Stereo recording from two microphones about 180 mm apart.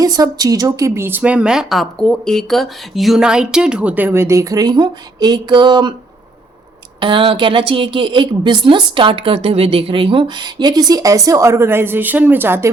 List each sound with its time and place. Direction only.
0.0 s speech: 20° right (ahead or behind)
7.0 s a woman's voice: 30° right (ahead or behind)